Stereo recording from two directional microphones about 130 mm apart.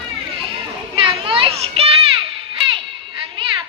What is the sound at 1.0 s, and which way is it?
Children playing, 40° right (ahead or behind).